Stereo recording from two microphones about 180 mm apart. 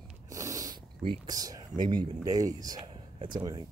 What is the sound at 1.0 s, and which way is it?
Speech, 25° right (ahead or behind).